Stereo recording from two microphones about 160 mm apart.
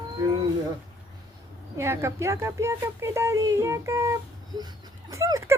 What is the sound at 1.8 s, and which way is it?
Speech, 15° right (ahead or behind).